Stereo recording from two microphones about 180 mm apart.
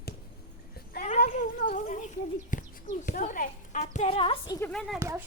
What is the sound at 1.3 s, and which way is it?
Cat, 45° left (ahead or behind).